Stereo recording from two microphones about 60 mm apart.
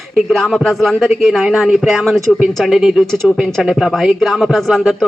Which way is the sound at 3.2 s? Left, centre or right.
Centre.